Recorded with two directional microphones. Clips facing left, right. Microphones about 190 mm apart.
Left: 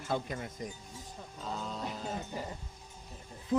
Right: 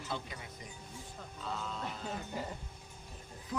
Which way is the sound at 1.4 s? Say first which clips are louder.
Left 2 dB; 40° left (ahead or behind).